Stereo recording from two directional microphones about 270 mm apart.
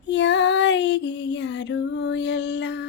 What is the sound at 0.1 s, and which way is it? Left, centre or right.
Female singing, left.